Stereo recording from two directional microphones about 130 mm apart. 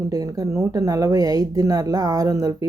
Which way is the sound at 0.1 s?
30° right (ahead or behind).